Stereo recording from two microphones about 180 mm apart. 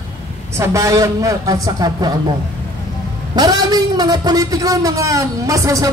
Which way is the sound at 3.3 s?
20° right (ahead or behind).